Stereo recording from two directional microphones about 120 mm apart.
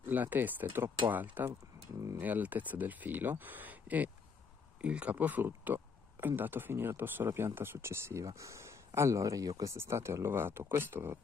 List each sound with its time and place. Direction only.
0.0 s speech: 15° right (ahead or behind)